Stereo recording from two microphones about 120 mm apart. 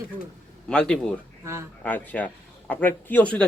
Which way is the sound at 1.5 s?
25° right (ahead or behind).